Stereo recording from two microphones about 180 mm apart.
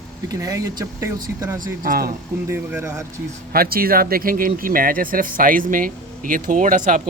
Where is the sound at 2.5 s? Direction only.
15° right (ahead or behind).